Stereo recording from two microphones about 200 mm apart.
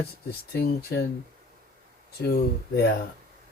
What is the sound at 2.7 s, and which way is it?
Speech, 50° left (ahead or behind).